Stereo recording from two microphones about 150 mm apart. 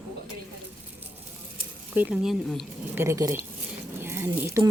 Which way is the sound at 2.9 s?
15° right (ahead or behind).